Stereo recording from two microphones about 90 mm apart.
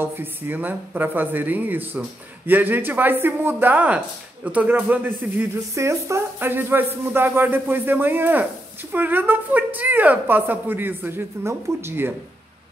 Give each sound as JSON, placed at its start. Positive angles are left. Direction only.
{"t": 0.0, "sound": "speech", "side_deg": -25}
{"t": 5.8, "sound": "speech", "side_deg": -35}